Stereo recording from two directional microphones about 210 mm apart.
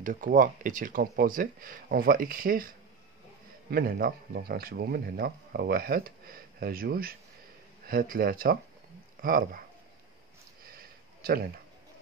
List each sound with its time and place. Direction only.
0.0 s speech: 40° right (ahead or behind)
3.7 s speech: 45° right (ahead or behind)
10.7 s a sound: 45° right (ahead or behind)